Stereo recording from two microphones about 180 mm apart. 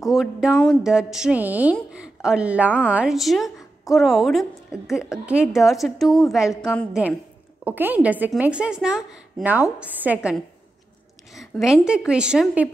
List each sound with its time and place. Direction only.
0.0 s music: centre (ahead or behind)
0.5 s speech: 5° left (ahead or behind)
6.5 s a woman's voice: 15° left (ahead or behind)
7.6 s a woman's voice: 10° right (ahead or behind)
11.3 s speech: centre (ahead or behind)